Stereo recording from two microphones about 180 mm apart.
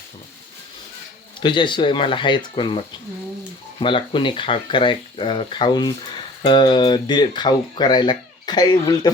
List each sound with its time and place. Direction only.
1.4 s speech: 25° left (ahead or behind)